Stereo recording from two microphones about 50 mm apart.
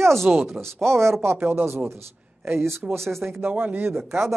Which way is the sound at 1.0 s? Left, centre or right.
Right.